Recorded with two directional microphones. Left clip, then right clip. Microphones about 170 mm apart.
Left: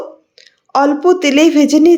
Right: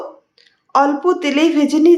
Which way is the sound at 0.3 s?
30° left (ahead or behind).